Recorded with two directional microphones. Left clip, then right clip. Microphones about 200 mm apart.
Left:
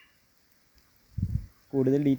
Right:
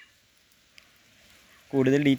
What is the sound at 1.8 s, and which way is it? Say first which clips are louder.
Speech: right 3 dB; centre (ahead or behind).